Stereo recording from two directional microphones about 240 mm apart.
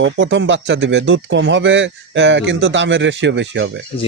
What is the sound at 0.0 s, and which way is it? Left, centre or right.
Speech, right.